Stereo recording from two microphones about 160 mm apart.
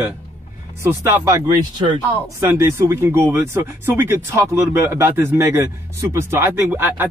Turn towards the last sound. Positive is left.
turn(degrees=-10)  # may be behind; listen again after turning